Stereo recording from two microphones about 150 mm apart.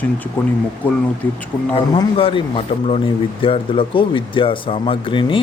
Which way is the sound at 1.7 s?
35° left (ahead or behind).